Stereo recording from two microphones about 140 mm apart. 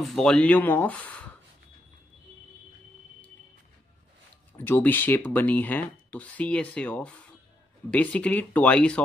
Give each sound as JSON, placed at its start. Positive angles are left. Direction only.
{"t": 0.0, "sound": "speech", "side_deg": 5}
{"t": 4.6, "sound": "speech", "side_deg": 15}